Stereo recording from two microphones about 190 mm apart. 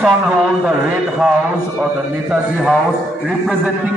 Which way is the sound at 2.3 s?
Centre (ahead or behind).